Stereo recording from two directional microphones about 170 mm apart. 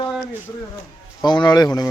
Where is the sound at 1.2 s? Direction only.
25° left (ahead or behind).